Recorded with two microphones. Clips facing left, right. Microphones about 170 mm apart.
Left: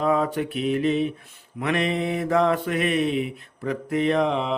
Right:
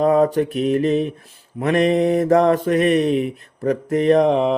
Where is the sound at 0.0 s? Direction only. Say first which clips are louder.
Right 7 dB; 40° right (ahead or behind).